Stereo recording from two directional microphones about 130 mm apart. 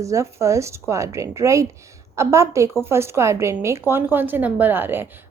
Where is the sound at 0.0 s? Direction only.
25° right (ahead or behind).